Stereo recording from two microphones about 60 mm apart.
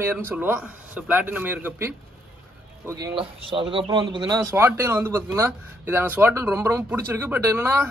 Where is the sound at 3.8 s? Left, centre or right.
Right.